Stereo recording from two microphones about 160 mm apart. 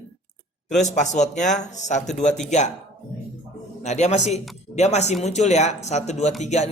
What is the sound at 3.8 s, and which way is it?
A man's voice, 45° left (ahead or behind).